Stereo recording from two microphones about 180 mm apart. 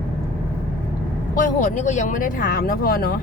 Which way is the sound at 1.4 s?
45° left (ahead or behind).